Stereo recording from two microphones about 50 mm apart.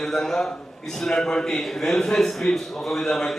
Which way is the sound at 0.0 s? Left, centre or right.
Centre.